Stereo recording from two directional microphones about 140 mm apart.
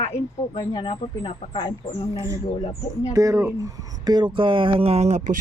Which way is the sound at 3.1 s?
20° right (ahead or behind).